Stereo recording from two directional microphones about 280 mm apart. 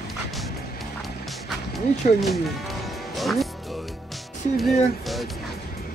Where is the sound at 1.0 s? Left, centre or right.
Centre.